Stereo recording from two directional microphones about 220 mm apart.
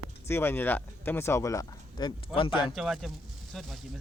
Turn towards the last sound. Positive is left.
turn(degrees=0)  # may be behind; listen again after turning